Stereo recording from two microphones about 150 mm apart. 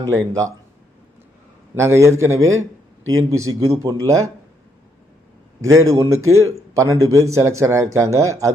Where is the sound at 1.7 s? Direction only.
15° right (ahead or behind).